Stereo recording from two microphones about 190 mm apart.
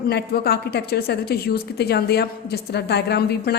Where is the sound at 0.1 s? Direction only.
55° left (ahead or behind).